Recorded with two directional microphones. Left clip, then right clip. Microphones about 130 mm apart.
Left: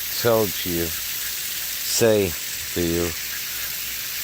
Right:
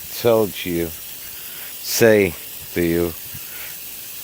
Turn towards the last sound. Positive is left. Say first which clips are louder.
# right 4 dB
turn(degrees=-50)  # may be behind; listen again after turning